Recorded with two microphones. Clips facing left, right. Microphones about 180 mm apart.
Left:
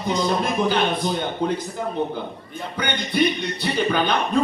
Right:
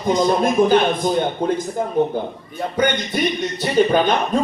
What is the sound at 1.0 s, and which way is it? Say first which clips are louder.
Speech: right 4 dB; 50° right (ahead or behind).